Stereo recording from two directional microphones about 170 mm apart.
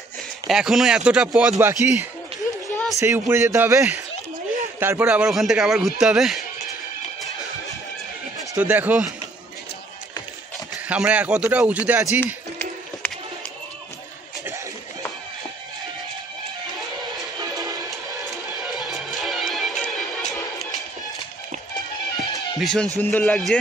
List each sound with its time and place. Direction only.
0.5 s a man's voice: 5° right (ahead or behind)
2.7 s a sound: 5° left (ahead or behind)
3.0 s a man's voice: 15° right (ahead or behind)
8.5 s a man's voice: 10° right (ahead or behind)
10.9 s a man's voice: 10° right (ahead or behind)
13.0 s run: 10° left (ahead or behind)
17.8 s music: centre (ahead or behind)
22.6 s a man's voice: centre (ahead or behind)